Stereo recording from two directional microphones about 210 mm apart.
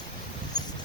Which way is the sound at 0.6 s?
20° left (ahead or behind).